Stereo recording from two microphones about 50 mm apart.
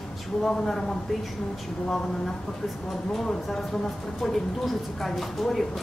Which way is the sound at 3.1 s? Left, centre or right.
Centre.